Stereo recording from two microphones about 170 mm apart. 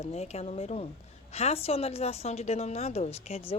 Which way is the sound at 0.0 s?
40° left (ahead or behind).